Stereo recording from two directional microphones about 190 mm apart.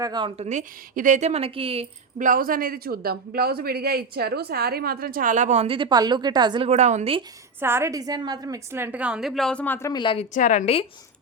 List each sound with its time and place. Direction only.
0.0 s a woman's voice: 25° right (ahead or behind)
6.7 s a woman's voice: 35° right (ahead or behind)
7.6 s a woman's voice: 15° right (ahead or behind); by 10.2 s 25° left (ahead or behind)
10.3 s a woman's voice: 40° left (ahead or behind)